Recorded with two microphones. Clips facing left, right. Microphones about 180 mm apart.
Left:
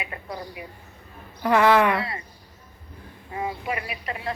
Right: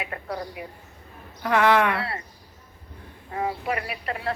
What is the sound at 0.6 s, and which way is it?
Speech, 50° right (ahead or behind).